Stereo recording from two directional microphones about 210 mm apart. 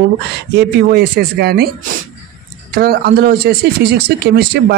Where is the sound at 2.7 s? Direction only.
50° right (ahead or behind).